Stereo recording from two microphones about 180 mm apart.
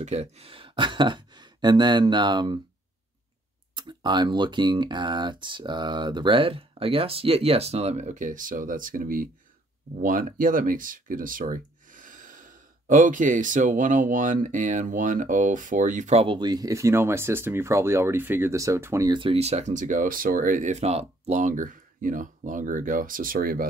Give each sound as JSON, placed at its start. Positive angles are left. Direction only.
{"t": 0.0, "sound": "speech", "side_deg": -35}
{"t": 3.7, "sound": "speech", "side_deg": -25}
{"t": 16.3, "sound": "speech", "side_deg": -20}